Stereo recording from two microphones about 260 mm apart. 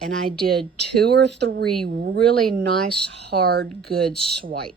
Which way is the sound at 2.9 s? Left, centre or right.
Right.